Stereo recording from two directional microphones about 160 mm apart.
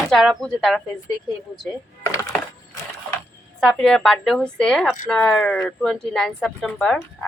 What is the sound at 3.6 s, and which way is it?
A woman's voice, 5° left (ahead or behind).